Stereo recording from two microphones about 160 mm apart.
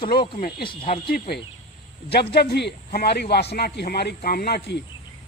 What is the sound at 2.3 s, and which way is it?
A man's voice, 90° left.